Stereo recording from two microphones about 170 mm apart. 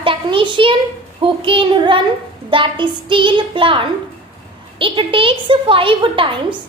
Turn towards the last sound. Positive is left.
turn(degrees=-30)  # may be behind; listen again after turning